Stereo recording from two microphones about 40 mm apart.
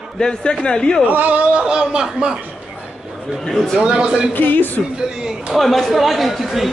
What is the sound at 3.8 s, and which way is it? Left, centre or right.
Speech, right.